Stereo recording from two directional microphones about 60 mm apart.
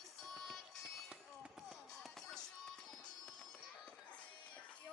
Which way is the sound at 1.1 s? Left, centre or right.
Centre.